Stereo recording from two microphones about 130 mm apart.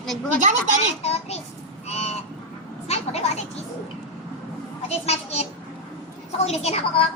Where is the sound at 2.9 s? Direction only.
55° left (ahead or behind).